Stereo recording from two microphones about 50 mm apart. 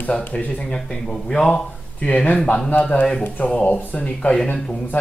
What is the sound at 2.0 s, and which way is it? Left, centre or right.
A man's voice, left.